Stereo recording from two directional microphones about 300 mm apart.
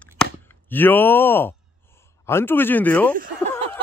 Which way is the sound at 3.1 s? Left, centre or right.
Right.